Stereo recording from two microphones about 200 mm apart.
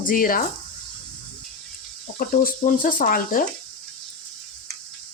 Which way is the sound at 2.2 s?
45° left (ahead or behind).